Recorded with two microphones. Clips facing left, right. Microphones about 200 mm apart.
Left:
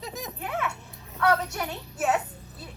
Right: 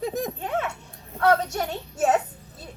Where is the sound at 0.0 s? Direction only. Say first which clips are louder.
Right 10 dB; 55° right (ahead or behind).